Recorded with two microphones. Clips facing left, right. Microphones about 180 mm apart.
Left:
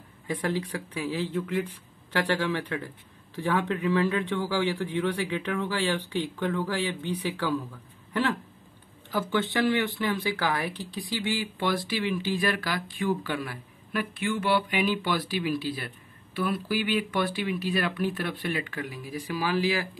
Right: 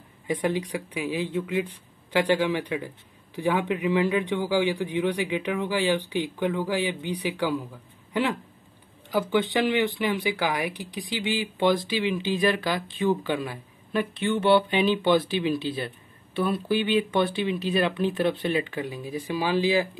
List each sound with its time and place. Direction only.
0.3 s a man's voice: 20° right (ahead or behind)